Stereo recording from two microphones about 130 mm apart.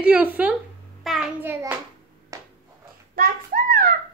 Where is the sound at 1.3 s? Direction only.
15° right (ahead or behind).